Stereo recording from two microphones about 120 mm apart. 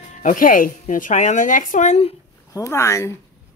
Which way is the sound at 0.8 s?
90° left.